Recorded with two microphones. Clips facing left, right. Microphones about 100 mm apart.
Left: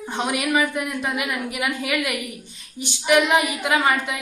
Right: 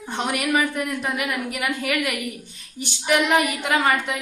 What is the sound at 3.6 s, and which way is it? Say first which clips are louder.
Speech: even; 10° left (ahead or behind).